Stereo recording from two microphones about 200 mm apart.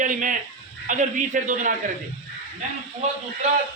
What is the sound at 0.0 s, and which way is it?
A man's voice, 40° right (ahead or behind).